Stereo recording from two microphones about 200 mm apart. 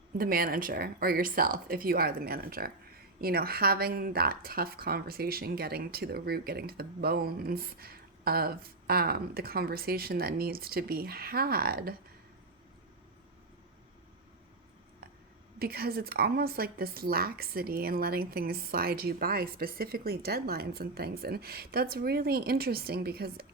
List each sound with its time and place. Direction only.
0.2 s speech: 45° right (ahead or behind)
15.5 s speech: 50° right (ahead or behind)